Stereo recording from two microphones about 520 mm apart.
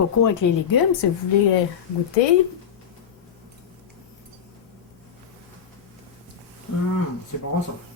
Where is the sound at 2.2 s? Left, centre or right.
Left.